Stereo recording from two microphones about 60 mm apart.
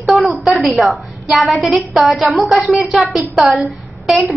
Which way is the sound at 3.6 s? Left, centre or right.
Centre.